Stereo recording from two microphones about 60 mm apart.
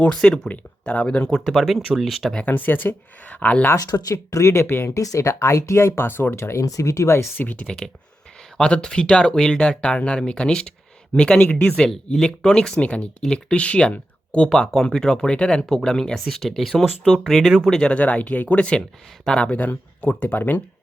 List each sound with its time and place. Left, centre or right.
0.1 s speech: centre
0.5 s speech: left
1.0 s speech: centre
1.5 s speech: centre
2.5 s speech: left
3.8 s speech: left
4.9 s speech: left
6.3 s speech: left
6.7 s speech: left
7.3 s speech: left
19.5 s speech: left